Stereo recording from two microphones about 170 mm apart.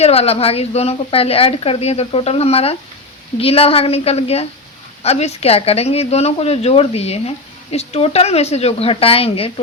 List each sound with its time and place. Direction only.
0.0 s a woman's voice: 35° left (ahead or behind)